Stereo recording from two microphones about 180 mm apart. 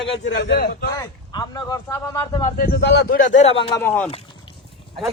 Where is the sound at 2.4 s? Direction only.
50° left (ahead or behind).